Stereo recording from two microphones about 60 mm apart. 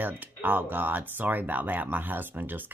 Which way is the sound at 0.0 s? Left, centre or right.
Right.